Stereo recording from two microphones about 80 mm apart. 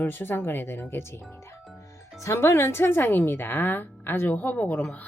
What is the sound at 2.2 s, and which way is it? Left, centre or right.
Speech, left.